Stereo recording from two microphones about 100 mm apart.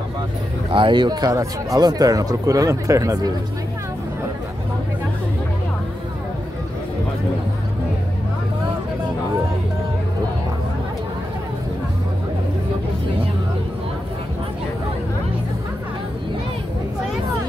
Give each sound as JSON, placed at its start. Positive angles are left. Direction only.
{"t": 0.7, "sound": "speech", "side_deg": -55}